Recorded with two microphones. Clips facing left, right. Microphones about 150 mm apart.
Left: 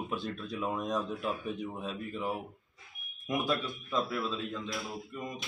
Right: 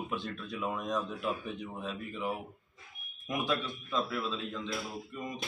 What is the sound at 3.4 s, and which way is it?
Speech, centre (ahead or behind).